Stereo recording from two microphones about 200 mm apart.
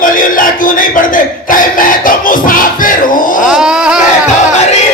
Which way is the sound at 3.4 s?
5° right (ahead or behind).